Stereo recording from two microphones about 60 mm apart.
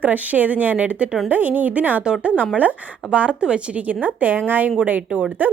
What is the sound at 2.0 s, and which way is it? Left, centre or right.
A woman's voice, centre.